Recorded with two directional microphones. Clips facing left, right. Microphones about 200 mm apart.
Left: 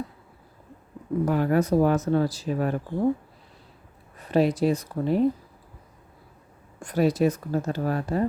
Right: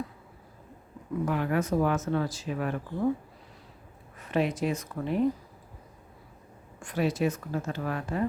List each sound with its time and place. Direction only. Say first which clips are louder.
1.2 s speech: left 5 dB; 40° left (ahead or behind)
4.2 s speech: left 6 dB; 35° left (ahead or behind)
6.7 s speech: left 6 dB; 40° left (ahead or behind)